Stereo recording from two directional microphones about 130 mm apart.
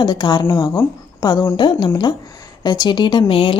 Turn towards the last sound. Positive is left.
turn(degrees=45)  # may be behind; listen again after turning